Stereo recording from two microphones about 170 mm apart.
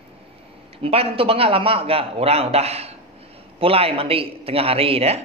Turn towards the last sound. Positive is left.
turn(degrees=-35)  # may be behind; listen again after turning